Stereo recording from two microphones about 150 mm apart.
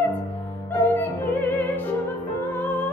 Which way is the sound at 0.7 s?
15° left (ahead or behind).